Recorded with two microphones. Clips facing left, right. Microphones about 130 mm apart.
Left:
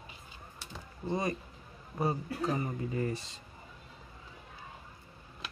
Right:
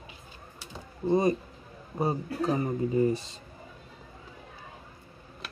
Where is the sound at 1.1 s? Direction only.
25° right (ahead or behind).